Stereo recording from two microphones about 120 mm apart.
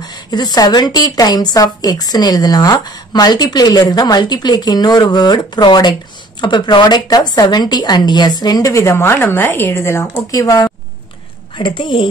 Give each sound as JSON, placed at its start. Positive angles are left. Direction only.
{"t": 0.0, "sound": "a woman's voice", "side_deg": 35}
{"t": 11.5, "sound": "a woman's voice", "side_deg": 45}